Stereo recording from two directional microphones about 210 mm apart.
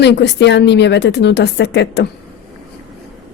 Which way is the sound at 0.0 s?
55° left (ahead or behind).